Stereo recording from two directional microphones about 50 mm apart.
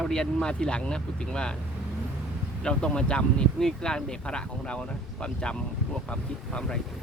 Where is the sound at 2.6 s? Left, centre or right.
Centre.